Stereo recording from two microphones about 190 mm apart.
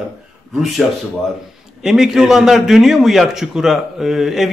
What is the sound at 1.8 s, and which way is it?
A man's voice, 5° right (ahead or behind).